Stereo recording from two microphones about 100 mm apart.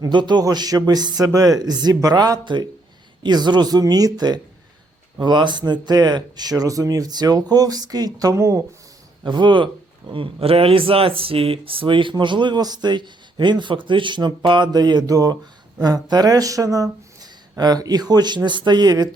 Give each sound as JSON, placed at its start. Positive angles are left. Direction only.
{"t": 0.0, "sound": "speech", "side_deg": -50}
{"t": 9.2, "sound": "speech", "side_deg": -50}